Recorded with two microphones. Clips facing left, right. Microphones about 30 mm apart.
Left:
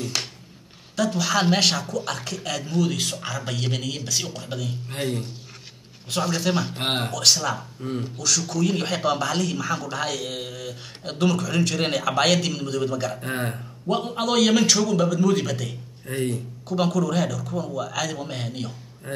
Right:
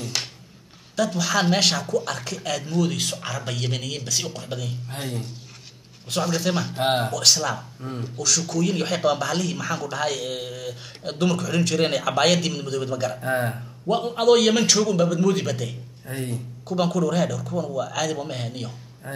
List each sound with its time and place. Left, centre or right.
0.0 s a sound: centre
0.9 s speech: centre
13.2 s speech: centre
13.6 s speech: centre